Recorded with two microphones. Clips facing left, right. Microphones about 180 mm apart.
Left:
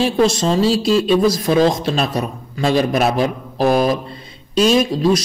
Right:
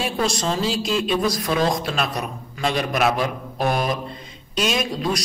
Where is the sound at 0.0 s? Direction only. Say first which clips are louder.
Left 8 dB; 30° left (ahead or behind).